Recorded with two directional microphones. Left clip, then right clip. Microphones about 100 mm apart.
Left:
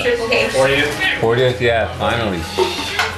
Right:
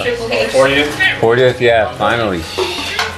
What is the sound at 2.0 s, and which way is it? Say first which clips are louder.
Speech: right 4 dB; 20° right (ahead or behind).